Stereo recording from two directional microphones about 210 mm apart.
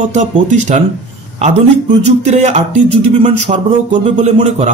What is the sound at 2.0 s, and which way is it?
Speech, 35° right (ahead or behind).